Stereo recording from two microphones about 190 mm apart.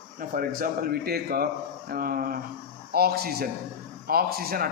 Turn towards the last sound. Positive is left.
turn(degrees=-50)  # may be behind; listen again after turning